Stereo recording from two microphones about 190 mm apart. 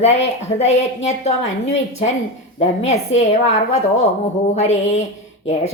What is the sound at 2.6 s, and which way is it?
A woman's voice, 35° left (ahead or behind).